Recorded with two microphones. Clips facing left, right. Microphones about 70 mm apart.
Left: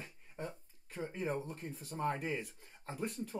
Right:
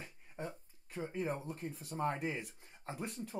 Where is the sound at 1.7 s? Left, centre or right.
Left.